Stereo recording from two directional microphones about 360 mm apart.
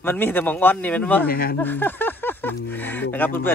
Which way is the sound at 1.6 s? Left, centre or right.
Centre.